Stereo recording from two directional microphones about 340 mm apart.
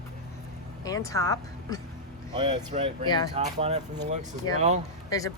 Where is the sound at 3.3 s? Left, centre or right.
Centre.